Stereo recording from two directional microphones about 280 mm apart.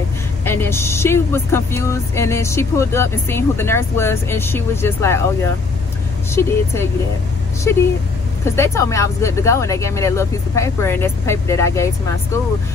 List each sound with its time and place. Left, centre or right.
0.5 s speech: centre